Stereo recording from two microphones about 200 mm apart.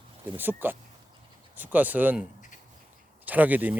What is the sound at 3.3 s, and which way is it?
Speech, 10° right (ahead or behind).